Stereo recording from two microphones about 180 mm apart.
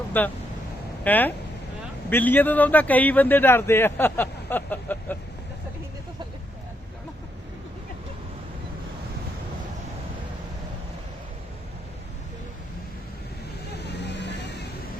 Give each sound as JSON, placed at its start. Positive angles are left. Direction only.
{"t": 0.1, "sound": "a man's voice", "side_deg": 10}
{"t": 13.7, "sound": "vehicle", "side_deg": 70}